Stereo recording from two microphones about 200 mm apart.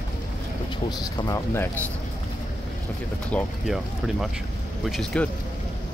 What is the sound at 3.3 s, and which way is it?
Speech, centre (ahead or behind).